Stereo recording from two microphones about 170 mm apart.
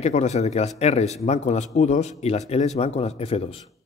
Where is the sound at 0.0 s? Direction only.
40° left (ahead or behind).